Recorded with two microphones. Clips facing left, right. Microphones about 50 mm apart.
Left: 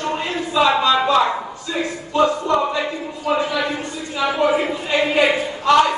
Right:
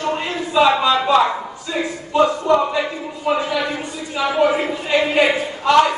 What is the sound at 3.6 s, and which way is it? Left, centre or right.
A man's voice, centre.